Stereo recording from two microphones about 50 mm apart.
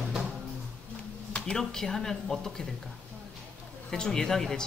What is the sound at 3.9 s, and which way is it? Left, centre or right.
Speech, centre.